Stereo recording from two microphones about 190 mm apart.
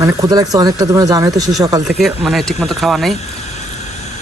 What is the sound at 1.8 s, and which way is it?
Speech, centre (ahead or behind).